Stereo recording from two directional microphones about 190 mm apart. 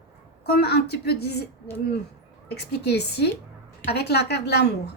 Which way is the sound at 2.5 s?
60° left (ahead or behind).